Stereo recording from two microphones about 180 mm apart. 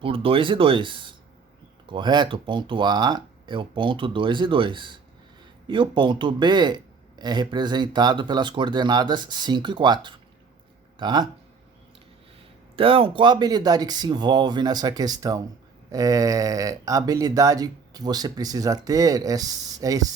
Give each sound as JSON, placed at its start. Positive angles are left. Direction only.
{"t": 0.0, "sound": "speech", "side_deg": -30}
{"t": 12.7, "sound": "speech", "side_deg": -30}